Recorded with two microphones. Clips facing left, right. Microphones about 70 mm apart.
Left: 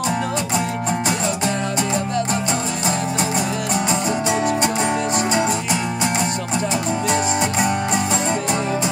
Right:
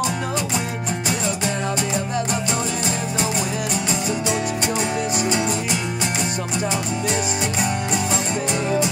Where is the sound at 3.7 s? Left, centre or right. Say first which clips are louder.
Left 3 dB; left.